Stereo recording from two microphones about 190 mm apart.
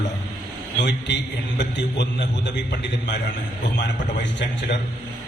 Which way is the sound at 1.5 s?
65° left (ahead or behind).